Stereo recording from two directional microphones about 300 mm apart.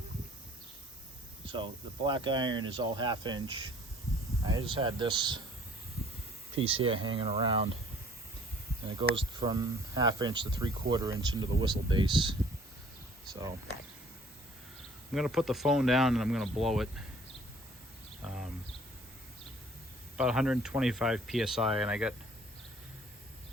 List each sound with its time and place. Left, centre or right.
1.5 s speech: centre
4.6 s speech: centre
6.7 s speech: centre
9.0 s speech: centre
15.1 s speech: centre
18.3 s a sound: centre
20.1 s speech: centre